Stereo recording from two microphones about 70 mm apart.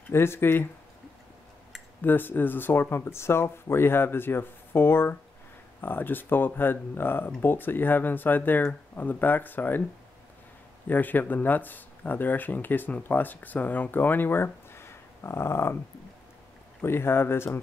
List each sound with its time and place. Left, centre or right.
0.1 s speech: left
2.0 s speech: left
10.9 s speech: left
16.8 s speech: left